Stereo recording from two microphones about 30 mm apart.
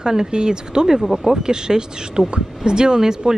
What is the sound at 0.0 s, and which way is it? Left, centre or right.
Speech, right.